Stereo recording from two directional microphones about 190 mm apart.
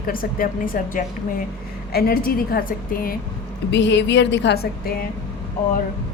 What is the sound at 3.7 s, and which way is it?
Speech, 70° left (ahead or behind).